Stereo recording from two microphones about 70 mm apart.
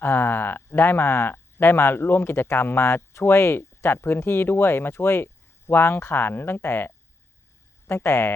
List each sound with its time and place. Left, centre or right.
0.0 s speech: left